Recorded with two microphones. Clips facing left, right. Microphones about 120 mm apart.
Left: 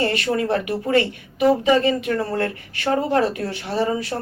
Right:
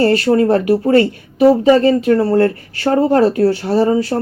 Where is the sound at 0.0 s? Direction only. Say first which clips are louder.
Right 9 dB; 35° right (ahead or behind).